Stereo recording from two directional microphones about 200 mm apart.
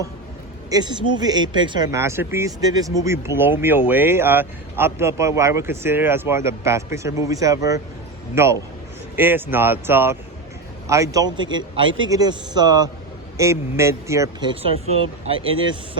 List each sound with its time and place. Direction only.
0.7 s speech: 20° right (ahead or behind)
14.5 s speech: 30° right (ahead or behind)